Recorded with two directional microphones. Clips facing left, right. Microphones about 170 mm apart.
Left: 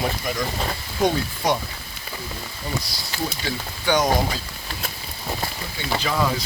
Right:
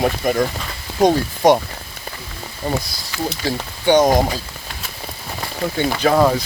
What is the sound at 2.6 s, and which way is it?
Speech, 50° right (ahead or behind).